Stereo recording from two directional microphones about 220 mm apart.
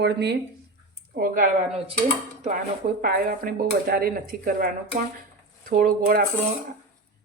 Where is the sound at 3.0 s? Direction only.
45° right (ahead or behind).